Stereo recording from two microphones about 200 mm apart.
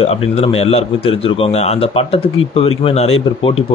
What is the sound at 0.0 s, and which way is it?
A man's voice, 30° left (ahead or behind).